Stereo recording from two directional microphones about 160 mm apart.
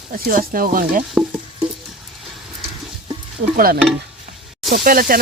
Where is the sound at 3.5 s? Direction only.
65° right (ahead or behind).